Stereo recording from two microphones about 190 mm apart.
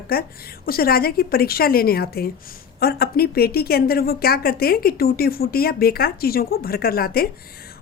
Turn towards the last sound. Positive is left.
turn(degrees=50)  # may be behind; listen again after turning